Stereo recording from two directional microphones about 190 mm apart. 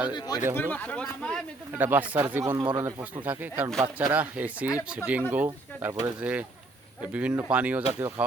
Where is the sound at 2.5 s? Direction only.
25° right (ahead or behind).